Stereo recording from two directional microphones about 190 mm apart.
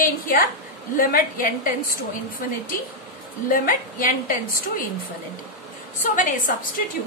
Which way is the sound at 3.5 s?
45° left (ahead or behind).